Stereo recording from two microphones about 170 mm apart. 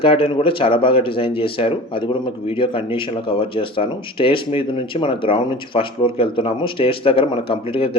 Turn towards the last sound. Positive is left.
turn(degrees=35)  # may be behind; listen again after turning